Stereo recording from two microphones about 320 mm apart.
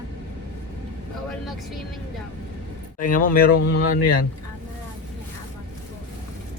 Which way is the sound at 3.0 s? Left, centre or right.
Left.